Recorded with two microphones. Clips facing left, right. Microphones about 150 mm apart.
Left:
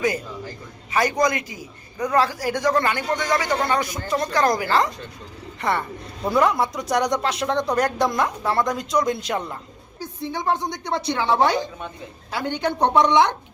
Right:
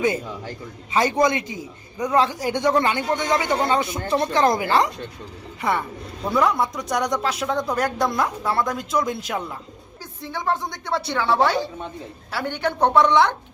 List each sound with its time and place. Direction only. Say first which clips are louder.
0.9 s a man's voice: right 1 dB; 25° right (ahead or behind)
6.2 s speech: left 1 dB; centre (ahead or behind)
10.0 s a woman's voice: left 2 dB; 15° left (ahead or behind)